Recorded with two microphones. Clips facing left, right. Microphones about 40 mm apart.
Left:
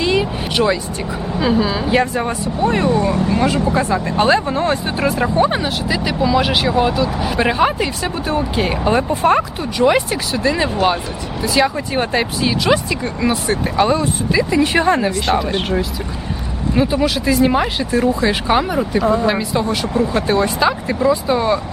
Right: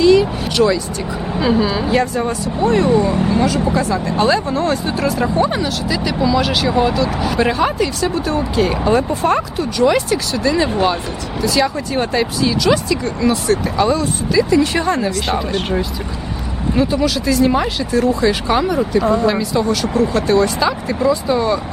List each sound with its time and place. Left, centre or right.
0.0 s vehicle: left
1.4 s speech: centre
1.9 s speech: left
3.3 s speech: left
16.7 s speech: centre
19.3 s speech: centre